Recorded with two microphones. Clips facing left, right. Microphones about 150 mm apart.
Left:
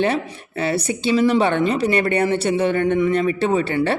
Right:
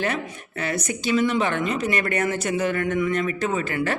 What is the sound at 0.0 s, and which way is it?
A man's voice, 30° left (ahead or behind).